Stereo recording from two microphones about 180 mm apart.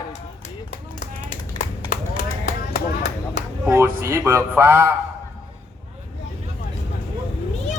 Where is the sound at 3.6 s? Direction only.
15° right (ahead or behind).